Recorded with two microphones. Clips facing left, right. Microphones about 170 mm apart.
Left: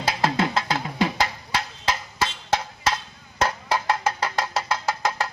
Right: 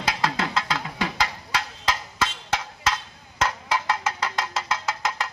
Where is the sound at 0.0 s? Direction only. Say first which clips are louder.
Left 3 dB; 30° left (ahead or behind).